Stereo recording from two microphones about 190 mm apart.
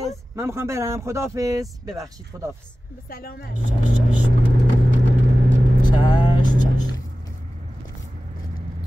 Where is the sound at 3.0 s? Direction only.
50° left (ahead or behind).